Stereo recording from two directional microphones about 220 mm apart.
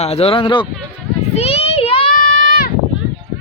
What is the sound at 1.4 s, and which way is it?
Children playing, 25° left (ahead or behind).